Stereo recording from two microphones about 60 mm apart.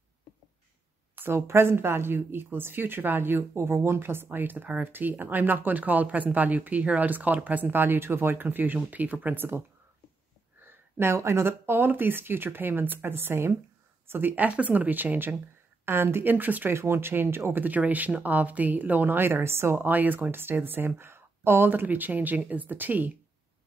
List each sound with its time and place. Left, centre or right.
1.1 s a woman's voice: right
10.6 s a sound: right
11.1 s speech: right
16.7 s speech: right